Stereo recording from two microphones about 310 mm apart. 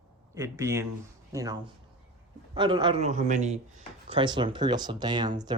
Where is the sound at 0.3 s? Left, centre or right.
Centre.